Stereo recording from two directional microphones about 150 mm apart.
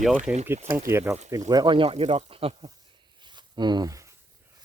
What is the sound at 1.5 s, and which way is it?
Speech, 30° right (ahead or behind).